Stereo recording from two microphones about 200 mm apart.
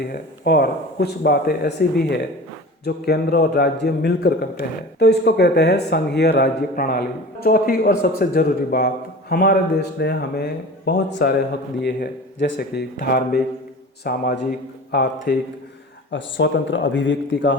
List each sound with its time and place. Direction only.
0.0 s a man's voice: 50° left (ahead or behind); by 17.6 s 65° left (ahead or behind)